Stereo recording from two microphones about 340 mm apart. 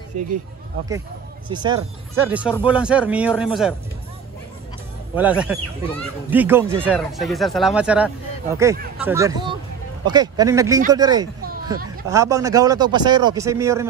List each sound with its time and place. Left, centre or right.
0.1 s speech: right
1.5 s a man's voice: centre
5.3 s a man's voice: centre